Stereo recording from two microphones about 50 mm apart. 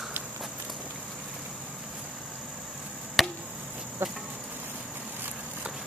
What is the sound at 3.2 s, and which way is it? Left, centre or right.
Chop, centre.